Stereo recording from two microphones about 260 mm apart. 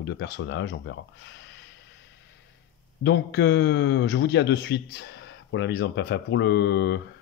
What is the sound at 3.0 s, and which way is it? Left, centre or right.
Speech, left.